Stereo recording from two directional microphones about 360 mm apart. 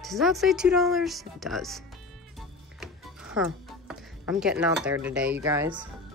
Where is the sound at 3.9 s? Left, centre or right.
Centre.